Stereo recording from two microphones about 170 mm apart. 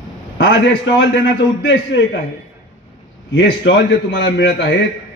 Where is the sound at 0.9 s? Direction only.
90° left.